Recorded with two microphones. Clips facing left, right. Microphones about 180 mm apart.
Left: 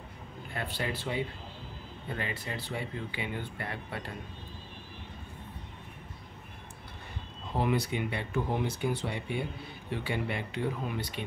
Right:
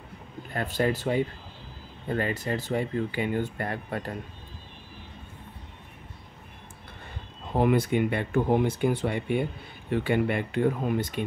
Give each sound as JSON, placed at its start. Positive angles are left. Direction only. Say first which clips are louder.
{"t": 0.5, "sound": "speech", "louder": "right 9 dB", "side_deg": -45}
{"t": 7.5, "sound": "speech", "louder": "right 7 dB", "side_deg": -50}